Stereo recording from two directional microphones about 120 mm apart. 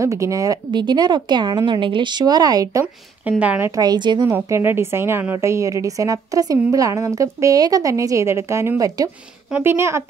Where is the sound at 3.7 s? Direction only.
35° right (ahead or behind).